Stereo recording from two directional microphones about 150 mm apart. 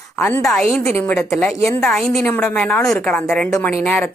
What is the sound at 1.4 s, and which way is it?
A woman's voice, 5° left (ahead or behind).